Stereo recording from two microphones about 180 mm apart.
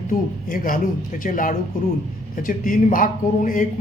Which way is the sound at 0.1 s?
50° left (ahead or behind).